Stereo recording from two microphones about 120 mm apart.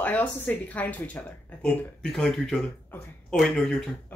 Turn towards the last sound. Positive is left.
turn(degrees=0)  # may be behind; listen again after turning